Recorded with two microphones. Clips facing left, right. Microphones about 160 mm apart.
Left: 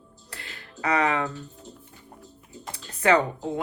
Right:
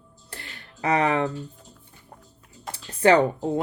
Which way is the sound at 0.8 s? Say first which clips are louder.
Right 2 dB; 30° right (ahead or behind).